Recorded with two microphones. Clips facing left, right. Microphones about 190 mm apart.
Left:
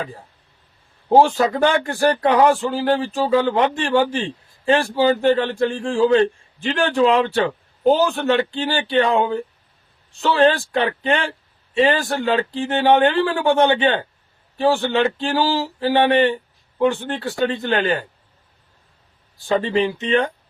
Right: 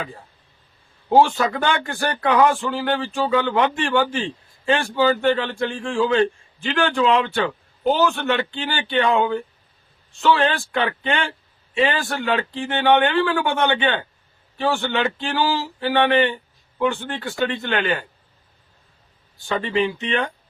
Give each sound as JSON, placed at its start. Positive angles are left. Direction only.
{"t": 1.2, "sound": "speech", "side_deg": 35}
{"t": 19.5, "sound": "speech", "side_deg": 30}